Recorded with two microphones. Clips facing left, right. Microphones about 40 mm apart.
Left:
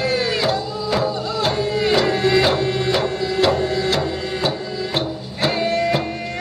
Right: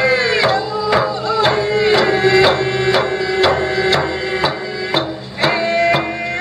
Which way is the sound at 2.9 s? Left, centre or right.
Right.